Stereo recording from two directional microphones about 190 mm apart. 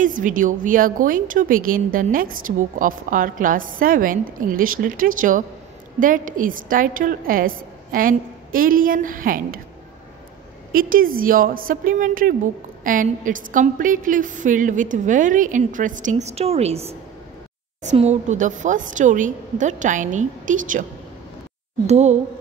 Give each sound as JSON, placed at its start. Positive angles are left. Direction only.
{"t": 0.0, "sound": "a woman's voice", "side_deg": -45}
{"t": 10.7, "sound": "a woman's voice", "side_deg": -45}
{"t": 21.8, "sound": "a woman's voice", "side_deg": -35}